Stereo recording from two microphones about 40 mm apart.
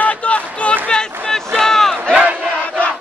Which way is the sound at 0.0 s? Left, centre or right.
Left.